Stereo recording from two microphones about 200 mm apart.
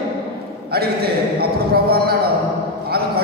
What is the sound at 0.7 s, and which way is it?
A man's voice, 50° right (ahead or behind).